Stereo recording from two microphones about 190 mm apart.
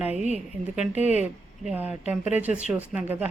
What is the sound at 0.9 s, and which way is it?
Speech, 35° left (ahead or behind).